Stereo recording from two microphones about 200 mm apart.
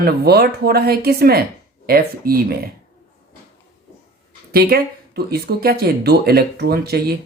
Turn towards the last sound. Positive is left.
turn(degrees=-50)  # may be behind; listen again after turning